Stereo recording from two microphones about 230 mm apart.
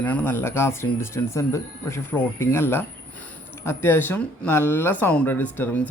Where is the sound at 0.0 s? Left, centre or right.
Centre.